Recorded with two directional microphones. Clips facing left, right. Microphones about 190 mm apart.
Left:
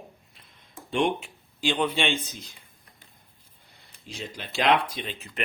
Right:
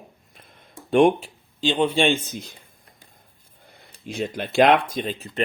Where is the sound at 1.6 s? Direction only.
25° right (ahead or behind); by 2.6 s 50° right (ahead or behind).